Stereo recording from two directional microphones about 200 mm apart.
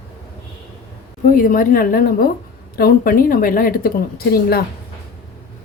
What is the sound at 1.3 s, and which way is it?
Speech, 45° left (ahead or behind).